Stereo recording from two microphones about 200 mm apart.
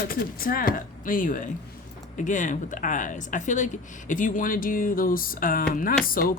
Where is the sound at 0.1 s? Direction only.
45° left (ahead or behind).